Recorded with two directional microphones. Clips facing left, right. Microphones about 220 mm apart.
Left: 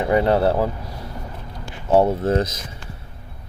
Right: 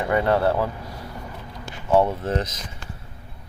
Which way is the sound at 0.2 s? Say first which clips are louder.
Left 3 dB; 25° left (ahead or behind).